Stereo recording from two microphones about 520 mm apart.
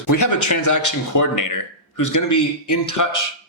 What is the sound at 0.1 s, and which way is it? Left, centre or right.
Speech, left.